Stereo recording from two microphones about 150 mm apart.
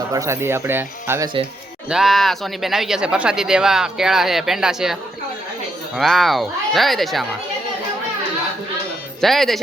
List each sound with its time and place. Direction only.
0.1 s speech: 20° right (ahead or behind)
1.9 s speech: centre (ahead or behind)
6.0 s speech: centre (ahead or behind)
9.2 s speech: centre (ahead or behind)